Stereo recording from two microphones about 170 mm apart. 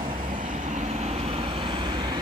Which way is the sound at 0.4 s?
50° right (ahead or behind).